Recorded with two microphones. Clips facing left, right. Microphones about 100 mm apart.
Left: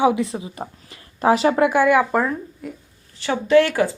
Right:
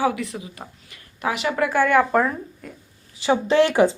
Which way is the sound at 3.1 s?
20° right (ahead or behind).